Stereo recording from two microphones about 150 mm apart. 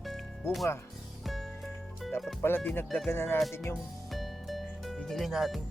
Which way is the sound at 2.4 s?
15° left (ahead or behind).